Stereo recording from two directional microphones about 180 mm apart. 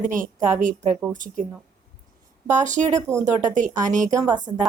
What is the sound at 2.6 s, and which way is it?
A woman's voice, 45° right (ahead or behind).